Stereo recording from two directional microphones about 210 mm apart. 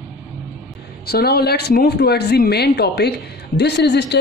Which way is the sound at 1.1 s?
50° left (ahead or behind).